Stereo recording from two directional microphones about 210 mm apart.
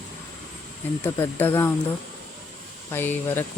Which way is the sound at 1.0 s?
10° left (ahead or behind).